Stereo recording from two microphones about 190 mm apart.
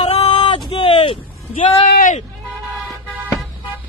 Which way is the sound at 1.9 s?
45° left (ahead or behind).